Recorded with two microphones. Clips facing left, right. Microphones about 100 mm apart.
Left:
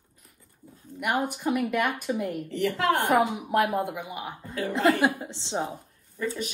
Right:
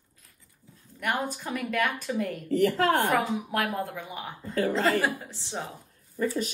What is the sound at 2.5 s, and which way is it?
Speech, 40° right (ahead or behind).